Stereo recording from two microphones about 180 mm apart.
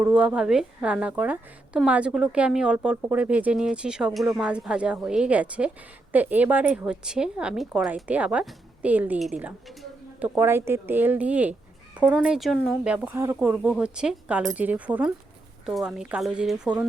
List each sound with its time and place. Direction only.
0.0 s a woman's voice: 5° right (ahead or behind)